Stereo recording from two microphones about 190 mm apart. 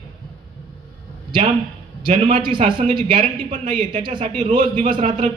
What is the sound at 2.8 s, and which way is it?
A man's voice, 40° right (ahead or behind).